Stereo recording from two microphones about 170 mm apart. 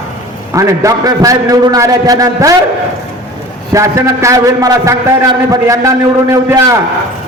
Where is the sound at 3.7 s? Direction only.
15° right (ahead or behind).